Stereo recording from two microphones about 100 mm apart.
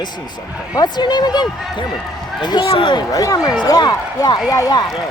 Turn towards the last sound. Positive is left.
turn(degrees=35)  # may be behind; listen again after turning